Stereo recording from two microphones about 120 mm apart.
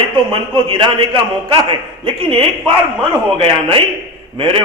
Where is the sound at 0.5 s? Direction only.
40° right (ahead or behind).